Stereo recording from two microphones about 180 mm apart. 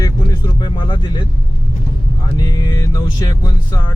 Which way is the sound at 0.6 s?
25° left (ahead or behind).